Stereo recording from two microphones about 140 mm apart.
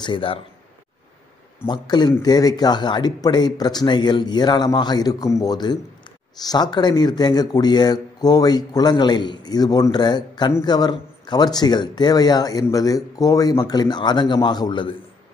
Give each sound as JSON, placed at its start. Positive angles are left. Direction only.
{"t": 0.0, "sound": "speech", "side_deg": 35}
{"t": 1.7, "sound": "speech", "side_deg": 30}